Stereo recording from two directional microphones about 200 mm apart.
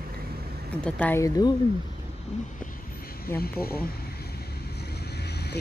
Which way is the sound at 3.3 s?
10° left (ahead or behind).